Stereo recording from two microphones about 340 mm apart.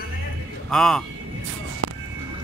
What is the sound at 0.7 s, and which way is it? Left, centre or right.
Speech, centre.